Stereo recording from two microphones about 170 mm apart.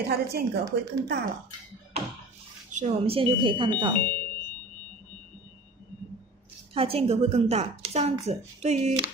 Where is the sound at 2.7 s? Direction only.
40° right (ahead or behind).